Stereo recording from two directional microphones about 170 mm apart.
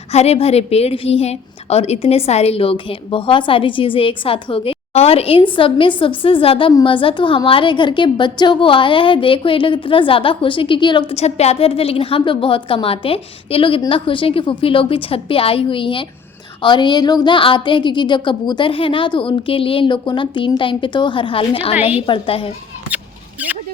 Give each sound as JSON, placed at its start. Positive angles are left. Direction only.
{"t": 0.1, "sound": "a woman's voice", "side_deg": 40}